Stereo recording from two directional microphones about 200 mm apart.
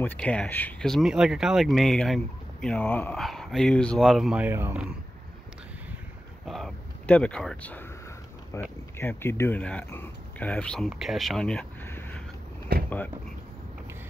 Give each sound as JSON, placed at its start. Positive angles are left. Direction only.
{"t": 0.0, "sound": "speech", "side_deg": 5}
{"t": 6.4, "sound": "speech", "side_deg": 0}
{"t": 12.7, "sound": "speech", "side_deg": -50}